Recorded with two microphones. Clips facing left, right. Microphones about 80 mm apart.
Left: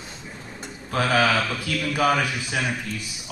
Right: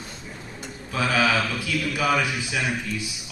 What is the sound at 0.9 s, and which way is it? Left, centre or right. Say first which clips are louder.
A man's voice: left 2 dB; left.